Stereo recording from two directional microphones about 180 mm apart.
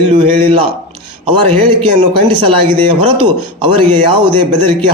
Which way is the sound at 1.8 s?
30° right (ahead or behind).